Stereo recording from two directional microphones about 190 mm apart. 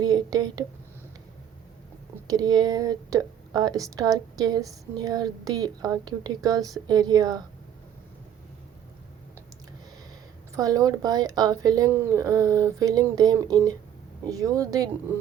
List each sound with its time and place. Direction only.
0.0 s speech: 20° right (ahead or behind)
2.2 s speech: 20° right (ahead or behind)
10.5 s speech: 20° right (ahead or behind)